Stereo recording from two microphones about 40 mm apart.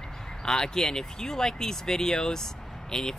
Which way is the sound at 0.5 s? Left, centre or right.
Centre.